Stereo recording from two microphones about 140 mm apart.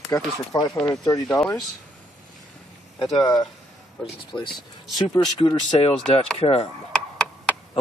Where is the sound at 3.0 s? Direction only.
40° left (ahead or behind).